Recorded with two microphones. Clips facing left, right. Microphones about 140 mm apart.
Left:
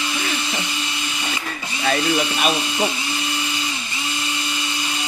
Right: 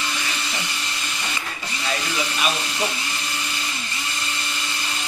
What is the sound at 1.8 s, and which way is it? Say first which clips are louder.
Speech: left 7 dB; 55° left (ahead or behind).